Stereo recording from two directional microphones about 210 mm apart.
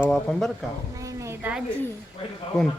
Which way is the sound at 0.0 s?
5° left (ahead or behind).